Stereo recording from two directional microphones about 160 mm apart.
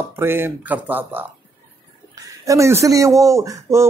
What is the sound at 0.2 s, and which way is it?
Speech, 15° right (ahead or behind).